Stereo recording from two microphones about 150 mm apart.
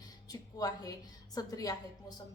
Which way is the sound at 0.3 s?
25° left (ahead or behind).